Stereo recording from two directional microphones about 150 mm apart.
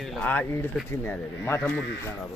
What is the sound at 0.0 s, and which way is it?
A man's voice, 5° left (ahead or behind).